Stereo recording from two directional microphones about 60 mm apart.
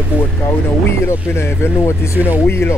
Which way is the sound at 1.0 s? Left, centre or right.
Left.